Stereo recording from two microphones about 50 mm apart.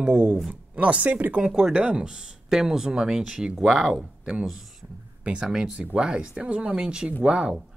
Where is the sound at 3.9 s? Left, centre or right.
Right.